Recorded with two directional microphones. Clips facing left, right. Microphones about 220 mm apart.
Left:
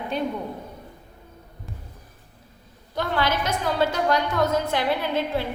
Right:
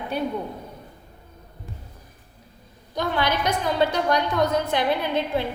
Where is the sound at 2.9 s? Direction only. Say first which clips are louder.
Even; 15° right (ahead or behind).